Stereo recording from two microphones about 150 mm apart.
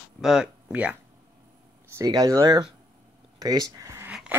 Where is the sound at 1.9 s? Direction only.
25° right (ahead or behind).